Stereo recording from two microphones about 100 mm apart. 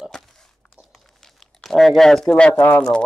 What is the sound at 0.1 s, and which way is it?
Crunch, 5° left (ahead or behind).